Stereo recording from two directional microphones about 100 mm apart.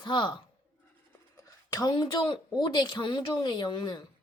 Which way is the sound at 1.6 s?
40° left (ahead or behind).